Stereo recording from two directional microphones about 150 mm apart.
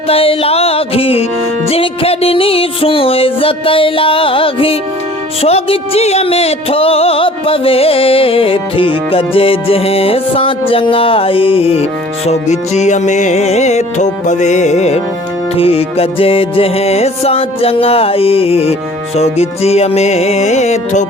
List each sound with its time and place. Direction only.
0.1 s music: 40° left (ahead or behind)